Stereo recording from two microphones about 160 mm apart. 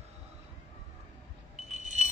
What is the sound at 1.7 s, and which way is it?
Alarm, 50° right (ahead or behind).